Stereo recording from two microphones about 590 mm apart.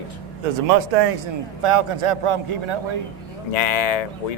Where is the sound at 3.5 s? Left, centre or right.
Left.